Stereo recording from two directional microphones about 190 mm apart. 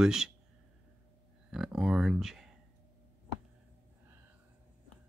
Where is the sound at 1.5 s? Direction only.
Centre (ahead or behind).